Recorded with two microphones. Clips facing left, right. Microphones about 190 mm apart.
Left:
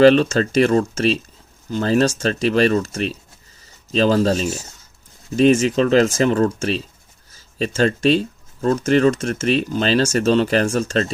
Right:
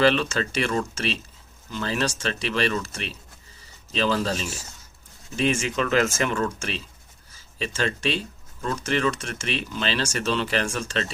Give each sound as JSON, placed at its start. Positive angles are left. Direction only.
{"t": 0.0, "sound": "speech", "side_deg": 40}